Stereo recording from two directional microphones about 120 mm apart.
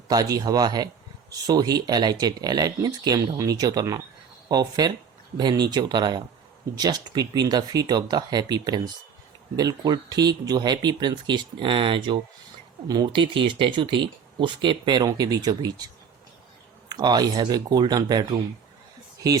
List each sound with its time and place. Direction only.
0.1 s speech: 30° right (ahead or behind)
16.9 s speech: 35° right (ahead or behind)